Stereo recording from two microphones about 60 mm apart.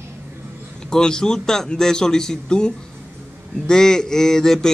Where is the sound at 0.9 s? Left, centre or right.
Centre.